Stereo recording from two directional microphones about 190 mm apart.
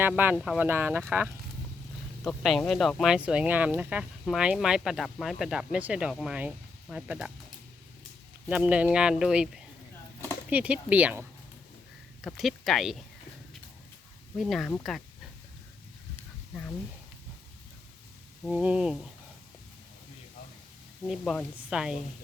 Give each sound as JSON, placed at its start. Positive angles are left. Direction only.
{"t": 0.3, "sound": "speech", "side_deg": 0}
{"t": 8.4, "sound": "speech", "side_deg": -5}
{"t": 14.3, "sound": "speech", "side_deg": 0}
{"t": 18.4, "sound": "speech", "side_deg": -5}
{"t": 21.1, "sound": "speech", "side_deg": 0}